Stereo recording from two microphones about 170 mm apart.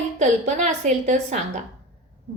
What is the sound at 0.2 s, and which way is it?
A woman's voice, 45° right (ahead or behind).